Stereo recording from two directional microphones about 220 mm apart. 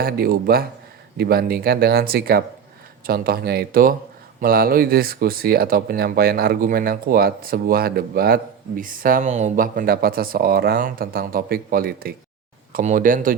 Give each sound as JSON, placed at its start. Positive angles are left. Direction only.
{"t": 0.0, "sound": "speech", "side_deg": -45}